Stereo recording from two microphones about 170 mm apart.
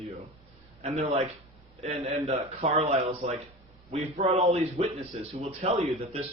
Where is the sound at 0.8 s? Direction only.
40° right (ahead or behind).